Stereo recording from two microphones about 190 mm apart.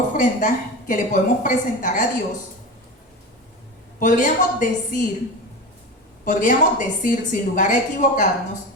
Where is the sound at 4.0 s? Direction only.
45° left (ahead or behind).